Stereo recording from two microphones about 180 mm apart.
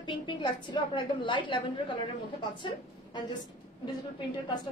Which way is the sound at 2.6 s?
25° left (ahead or behind).